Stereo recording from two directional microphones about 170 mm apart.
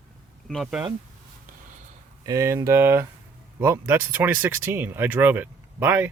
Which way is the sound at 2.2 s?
20° right (ahead or behind).